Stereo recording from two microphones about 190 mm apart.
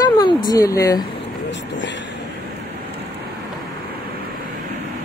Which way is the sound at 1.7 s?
70° left (ahead or behind).